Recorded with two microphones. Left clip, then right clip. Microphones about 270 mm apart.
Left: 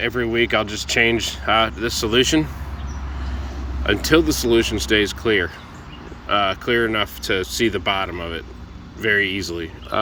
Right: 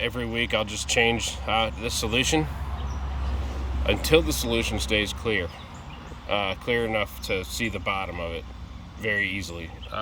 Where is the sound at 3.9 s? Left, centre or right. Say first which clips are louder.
Left 5 dB; centre.